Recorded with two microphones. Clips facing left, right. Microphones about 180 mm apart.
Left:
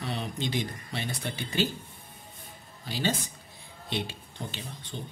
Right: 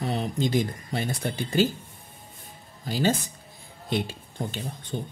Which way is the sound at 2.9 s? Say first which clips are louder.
Right 6 dB; 45° right (ahead or behind).